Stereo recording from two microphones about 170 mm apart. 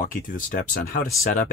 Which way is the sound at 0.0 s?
55° left (ahead or behind).